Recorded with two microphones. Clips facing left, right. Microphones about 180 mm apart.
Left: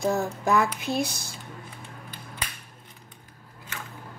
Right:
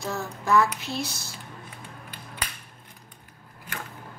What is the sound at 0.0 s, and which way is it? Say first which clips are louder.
A woman's voice: left 6 dB; 55° left (ahead or behind).